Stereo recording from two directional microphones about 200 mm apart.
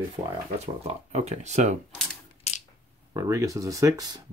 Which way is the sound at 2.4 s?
30° left (ahead or behind).